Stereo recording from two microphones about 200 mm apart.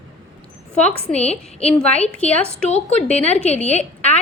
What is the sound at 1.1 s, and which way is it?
Speech, 30° left (ahead or behind).